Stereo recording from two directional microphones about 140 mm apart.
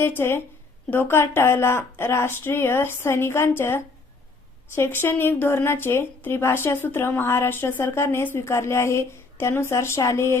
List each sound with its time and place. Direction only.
0.0 s speech: 15° left (ahead or behind)